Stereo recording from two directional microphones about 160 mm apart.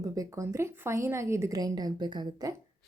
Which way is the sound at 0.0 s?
20° right (ahead or behind).